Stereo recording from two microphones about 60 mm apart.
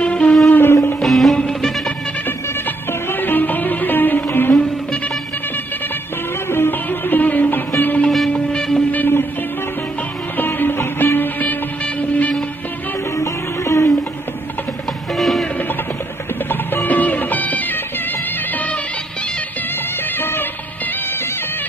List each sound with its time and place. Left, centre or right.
0.0 s music: centre
0.5 s a sound: left
1.0 s music: centre
2.9 s music: left
6.5 s music: left
8.3 s a sound: centre
8.9 s music: left
10.3 s music: left
13.2 s music: left
15.1 s music: centre
16.4 s music: left
20.2 s music: left